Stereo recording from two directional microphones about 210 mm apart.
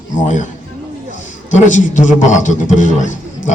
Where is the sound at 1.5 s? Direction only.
35° left (ahead or behind).